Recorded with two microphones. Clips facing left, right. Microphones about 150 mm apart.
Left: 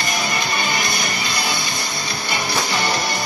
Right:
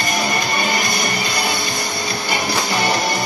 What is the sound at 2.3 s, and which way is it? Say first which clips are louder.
Music: right 1 dB; 50° right (ahead or behind).